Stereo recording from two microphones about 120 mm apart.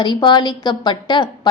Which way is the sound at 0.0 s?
40° left (ahead or behind).